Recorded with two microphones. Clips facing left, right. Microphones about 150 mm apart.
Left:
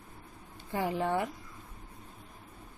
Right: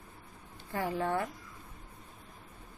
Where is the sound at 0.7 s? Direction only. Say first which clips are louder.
Left 2 dB; 15° left (ahead or behind).